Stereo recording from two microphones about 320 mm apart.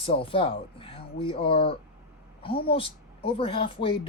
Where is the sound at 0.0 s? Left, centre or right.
Centre.